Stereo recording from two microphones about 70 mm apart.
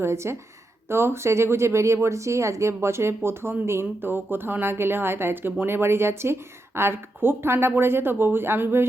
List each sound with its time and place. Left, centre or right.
0.0 s speech: right